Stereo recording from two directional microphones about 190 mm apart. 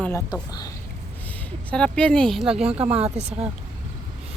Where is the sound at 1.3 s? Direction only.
5° left (ahead or behind).